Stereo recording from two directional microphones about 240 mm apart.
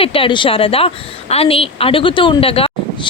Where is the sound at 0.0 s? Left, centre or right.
Left.